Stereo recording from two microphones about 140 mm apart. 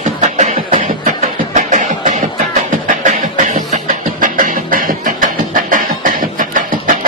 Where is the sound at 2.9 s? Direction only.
65° right (ahead or behind).